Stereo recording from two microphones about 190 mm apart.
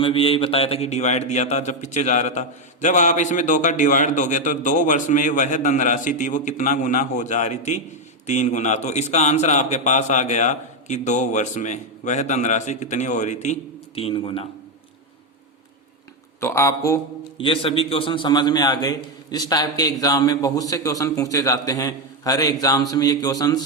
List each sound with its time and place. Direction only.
0.0 s a man's voice: 30° left (ahead or behind)
16.4 s speech: 15° left (ahead or behind)
17.3 s a man's voice: 30° left (ahead or behind)